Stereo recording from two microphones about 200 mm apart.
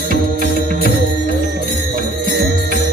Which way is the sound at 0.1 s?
40° right (ahead or behind).